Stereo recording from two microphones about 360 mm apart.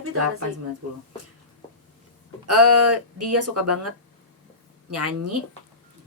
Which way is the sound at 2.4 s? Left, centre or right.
Right.